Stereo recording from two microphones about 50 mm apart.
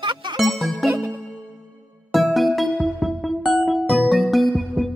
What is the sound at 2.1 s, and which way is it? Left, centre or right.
Music, centre.